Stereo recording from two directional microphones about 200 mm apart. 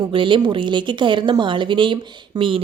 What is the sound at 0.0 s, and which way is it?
Speech, 25° right (ahead or behind).